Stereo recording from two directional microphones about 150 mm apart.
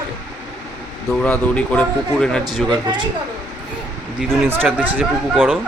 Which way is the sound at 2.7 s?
30° right (ahead or behind).